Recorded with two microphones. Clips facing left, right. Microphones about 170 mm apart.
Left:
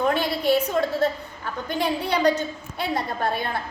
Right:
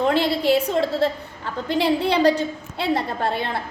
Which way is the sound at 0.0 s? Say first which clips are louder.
Right 3 dB; 25° right (ahead or behind).